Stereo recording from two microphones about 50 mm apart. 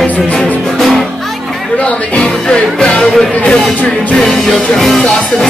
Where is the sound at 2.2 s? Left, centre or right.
Centre.